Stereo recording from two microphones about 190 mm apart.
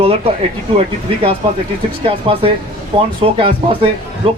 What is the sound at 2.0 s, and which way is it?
Speech, 30° right (ahead or behind).